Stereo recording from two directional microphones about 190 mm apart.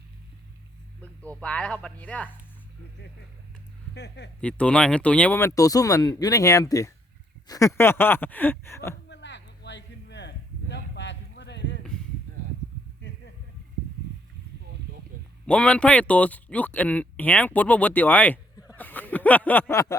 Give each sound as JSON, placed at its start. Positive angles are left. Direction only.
{"t": 1.2, "sound": "speech", "side_deg": 5}
{"t": 3.9, "sound": "speech", "side_deg": 65}
{"t": 4.4, "sound": "speech", "side_deg": 5}
{"t": 9.0, "sound": "a sound", "side_deg": 65}
{"t": 15.4, "sound": "speech", "side_deg": 5}
{"t": 18.7, "sound": "a sound", "side_deg": 10}